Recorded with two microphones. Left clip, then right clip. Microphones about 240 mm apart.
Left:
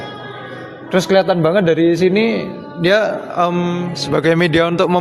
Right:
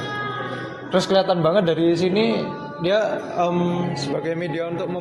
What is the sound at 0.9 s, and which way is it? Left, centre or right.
A man's voice, left.